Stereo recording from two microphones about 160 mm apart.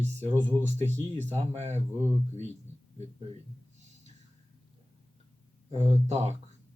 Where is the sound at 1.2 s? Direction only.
45° right (ahead or behind).